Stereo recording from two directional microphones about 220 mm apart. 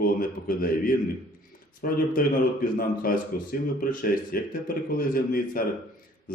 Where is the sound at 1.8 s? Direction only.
40° left (ahead or behind).